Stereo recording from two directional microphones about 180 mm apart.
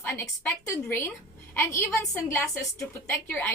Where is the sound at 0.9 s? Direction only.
15° left (ahead or behind).